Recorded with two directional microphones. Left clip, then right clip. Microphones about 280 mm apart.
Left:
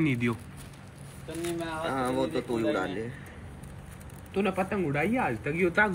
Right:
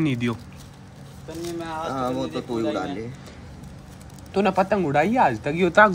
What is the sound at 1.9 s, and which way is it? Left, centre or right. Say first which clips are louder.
Speech: right 1 dB; centre.